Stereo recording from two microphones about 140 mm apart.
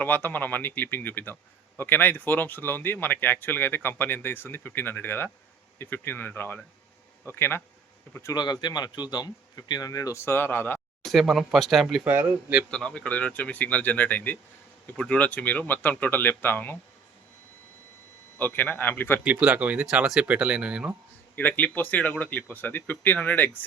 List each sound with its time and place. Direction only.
0.0 s a man's voice: 15° left (ahead or behind)
11.0 s speech: centre (ahead or behind)
12.1 s speech: 15° right (ahead or behind)
12.7 s a man's voice: 5° left (ahead or behind)
18.3 s a man's voice: 10° left (ahead or behind)
19.2 s speech: 10° right (ahead or behind)
21.3 s a man's voice: 10° left (ahead or behind)